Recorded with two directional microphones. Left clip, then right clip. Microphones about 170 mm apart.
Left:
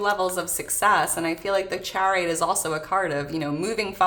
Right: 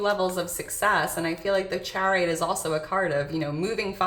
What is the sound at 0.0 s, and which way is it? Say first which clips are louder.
Speech: left 1 dB; 30° left (ahead or behind).